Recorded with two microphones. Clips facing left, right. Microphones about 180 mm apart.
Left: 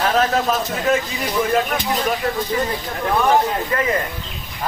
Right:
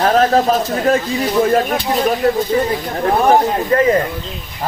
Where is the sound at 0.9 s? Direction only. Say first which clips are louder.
Right 3 dB; 35° right (ahead or behind).